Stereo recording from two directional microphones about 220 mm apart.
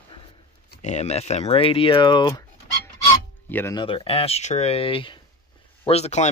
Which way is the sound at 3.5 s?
10° left (ahead or behind).